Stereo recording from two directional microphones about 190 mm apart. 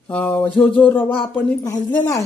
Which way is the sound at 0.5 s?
10° left (ahead or behind).